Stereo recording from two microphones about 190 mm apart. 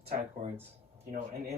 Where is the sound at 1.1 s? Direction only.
55° right (ahead or behind).